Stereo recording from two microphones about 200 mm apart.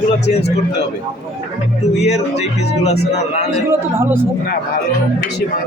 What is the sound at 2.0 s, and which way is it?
Speech, 35° left (ahead or behind).